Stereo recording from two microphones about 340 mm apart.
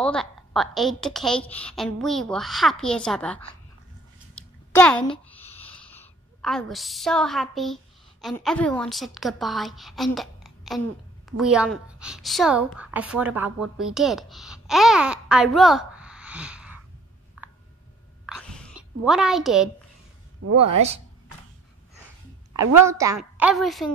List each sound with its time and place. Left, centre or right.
0.0 s a woman's voice: centre
4.4 s a sound: centre
5.6 s a woman's voice: centre
18.2 s a sound: centre
20.5 s speech: centre
22.8 s a woman's voice: centre